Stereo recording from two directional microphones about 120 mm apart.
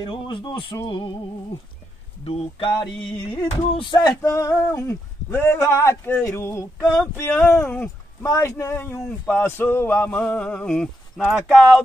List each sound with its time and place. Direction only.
0.0 s speech: 40° left (ahead or behind)
0.8 s a sound: 45° left (ahead or behind)
2.2 s a sound: 50° left (ahead or behind)
4.2 s speech: 25° left (ahead or behind)
7.4 s speech: 5° left (ahead or behind)
8.2 s speech: 25° left (ahead or behind); by 11.4 s 5° left (ahead or behind)